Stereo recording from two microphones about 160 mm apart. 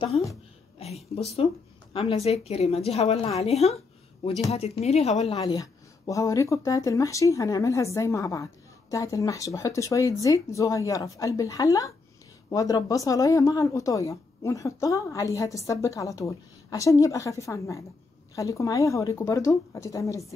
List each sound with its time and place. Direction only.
1.1 s a woman's voice: 40° left (ahead or behind)
5.3 s speech: 25° left (ahead or behind)